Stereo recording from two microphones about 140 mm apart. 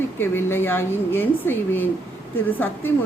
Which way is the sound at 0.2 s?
15° left (ahead or behind).